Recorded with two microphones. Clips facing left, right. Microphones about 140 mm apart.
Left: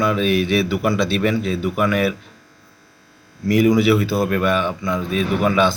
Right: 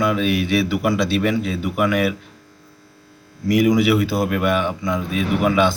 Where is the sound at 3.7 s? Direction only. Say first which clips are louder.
Left 1 dB; 15° right (ahead or behind).